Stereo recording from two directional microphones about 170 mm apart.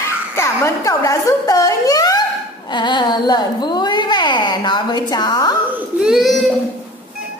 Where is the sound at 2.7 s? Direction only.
25° left (ahead or behind).